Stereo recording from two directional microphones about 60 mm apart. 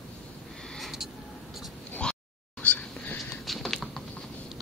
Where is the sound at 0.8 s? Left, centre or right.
Centre.